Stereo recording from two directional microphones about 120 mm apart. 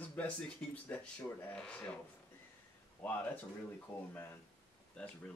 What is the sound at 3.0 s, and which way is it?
Speech, 10° left (ahead or behind).